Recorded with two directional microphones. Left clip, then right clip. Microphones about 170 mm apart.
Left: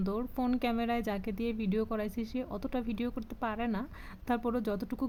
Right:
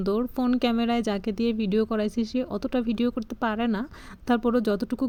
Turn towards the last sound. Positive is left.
turn(degrees=-25)  # may be behind; listen again after turning